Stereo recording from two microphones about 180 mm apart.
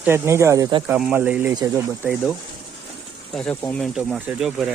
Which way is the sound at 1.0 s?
10° right (ahead or behind).